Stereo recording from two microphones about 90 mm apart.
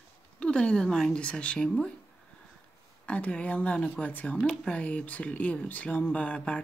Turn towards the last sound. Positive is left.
turn(degrees=10)  # may be behind; listen again after turning